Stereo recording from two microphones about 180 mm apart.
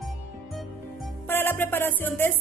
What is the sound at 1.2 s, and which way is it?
Music, 10° left (ahead or behind).